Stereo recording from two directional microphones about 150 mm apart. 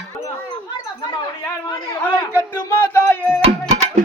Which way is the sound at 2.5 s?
15° left (ahead or behind).